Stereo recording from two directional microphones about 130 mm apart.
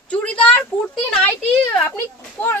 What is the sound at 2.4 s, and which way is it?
Children playing, 15° left (ahead or behind).